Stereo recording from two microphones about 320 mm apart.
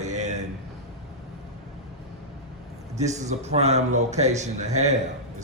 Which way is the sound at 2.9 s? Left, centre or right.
Right.